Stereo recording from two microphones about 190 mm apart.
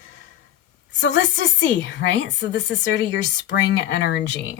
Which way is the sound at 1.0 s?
70° left (ahead or behind).